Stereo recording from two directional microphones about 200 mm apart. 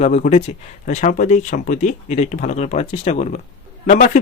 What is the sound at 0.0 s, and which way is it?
Speech, 35° left (ahead or behind).